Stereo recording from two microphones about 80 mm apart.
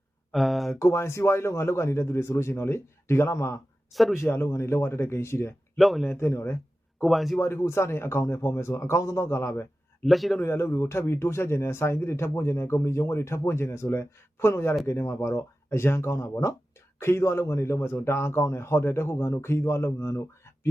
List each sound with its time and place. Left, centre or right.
0.3 s speech: centre
0.8 s a man's voice: left
3.9 s speech: centre
4.2 s a man's voice: left
5.7 s speech: centre
6.1 s speech: left
7.0 s speech: centre
7.3 s a man's voice: left
10.0 s speech: centre
10.4 s a man's voice: left